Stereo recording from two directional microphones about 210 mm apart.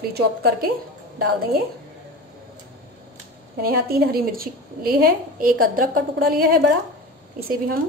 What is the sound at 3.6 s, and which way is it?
A woman's voice, 45° right (ahead or behind).